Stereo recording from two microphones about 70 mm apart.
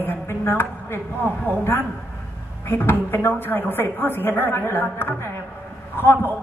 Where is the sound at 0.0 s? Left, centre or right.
Left.